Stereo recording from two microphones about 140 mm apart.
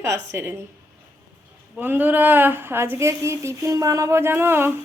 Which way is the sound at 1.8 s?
15° right (ahead or behind).